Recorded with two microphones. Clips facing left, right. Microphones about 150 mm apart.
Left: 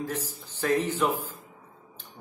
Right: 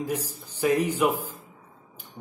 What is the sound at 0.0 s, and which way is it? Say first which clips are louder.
A man's voice: right 3 dB; 10° right (ahead or behind).